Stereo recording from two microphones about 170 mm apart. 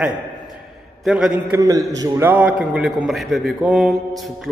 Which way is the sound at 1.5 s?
20° right (ahead or behind).